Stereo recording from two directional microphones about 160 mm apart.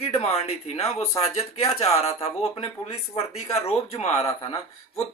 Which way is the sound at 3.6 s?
40° left (ahead or behind).